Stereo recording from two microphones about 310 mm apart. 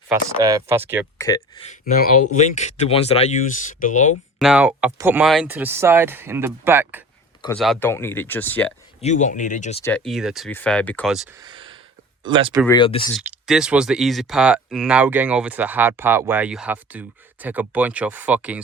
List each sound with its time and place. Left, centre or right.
0.1 s speech: centre
1.2 s speech: centre
4.4 s speech: centre
9.0 s speech: left
9.8 s speech: centre
11.3 s a sound: centre
12.2 s speech: centre
12.6 s speech: centre
13.1 s speech: centre